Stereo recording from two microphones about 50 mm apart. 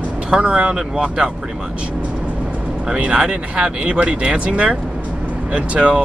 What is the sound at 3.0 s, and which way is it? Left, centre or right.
Speech, right.